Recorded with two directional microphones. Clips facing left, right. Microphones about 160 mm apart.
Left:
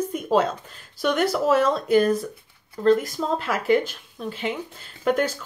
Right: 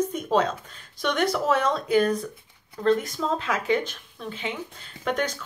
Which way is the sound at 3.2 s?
20° left (ahead or behind).